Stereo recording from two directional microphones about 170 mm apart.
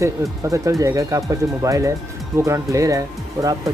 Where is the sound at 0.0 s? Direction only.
20° right (ahead or behind).